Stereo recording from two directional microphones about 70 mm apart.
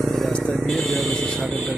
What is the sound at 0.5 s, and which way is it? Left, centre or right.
Vehicle, centre.